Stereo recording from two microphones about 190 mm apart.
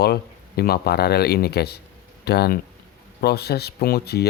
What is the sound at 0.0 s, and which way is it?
A man's voice, 55° left (ahead or behind).